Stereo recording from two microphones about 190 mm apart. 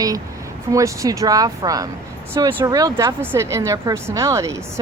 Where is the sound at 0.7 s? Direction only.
15° right (ahead or behind).